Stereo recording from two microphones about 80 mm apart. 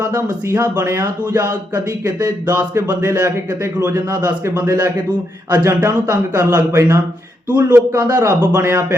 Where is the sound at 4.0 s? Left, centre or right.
Right.